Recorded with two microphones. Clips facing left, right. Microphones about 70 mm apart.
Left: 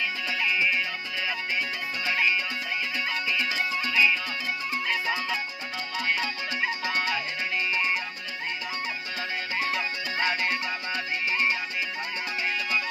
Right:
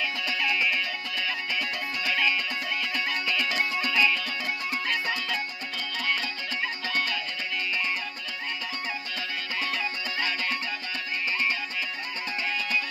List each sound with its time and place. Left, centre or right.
3.5 s music: centre
7.7 s music: left
10.1 s music: left